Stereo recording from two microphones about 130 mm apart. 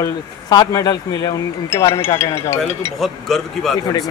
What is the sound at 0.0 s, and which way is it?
Speech, 30° left (ahead or behind).